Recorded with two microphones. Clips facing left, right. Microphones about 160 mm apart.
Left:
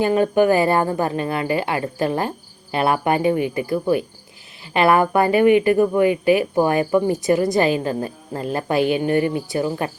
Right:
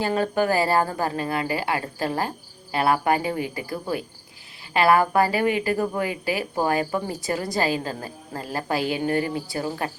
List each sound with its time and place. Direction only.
0.0 s a woman's voice: 20° left (ahead or behind)